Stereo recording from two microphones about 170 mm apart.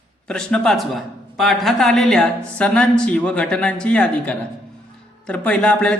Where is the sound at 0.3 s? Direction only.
5° left (ahead or behind).